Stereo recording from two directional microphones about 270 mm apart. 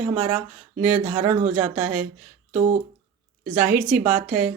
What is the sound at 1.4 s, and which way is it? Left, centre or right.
Speech, right.